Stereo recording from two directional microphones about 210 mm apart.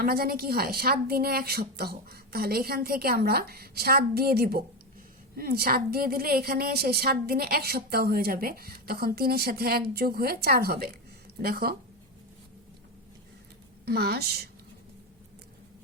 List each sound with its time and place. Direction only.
0.0 s a woman's voice: 45° right (ahead or behind)
13.8 s a woman's voice: 50° right (ahead or behind)